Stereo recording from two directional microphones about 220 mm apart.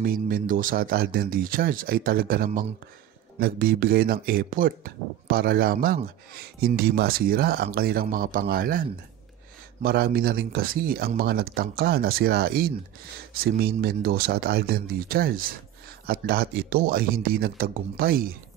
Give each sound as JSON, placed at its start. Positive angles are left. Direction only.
{"t": 0.0, "sound": "speech", "side_deg": -40}
{"t": 9.8, "sound": "speech", "side_deg": -45}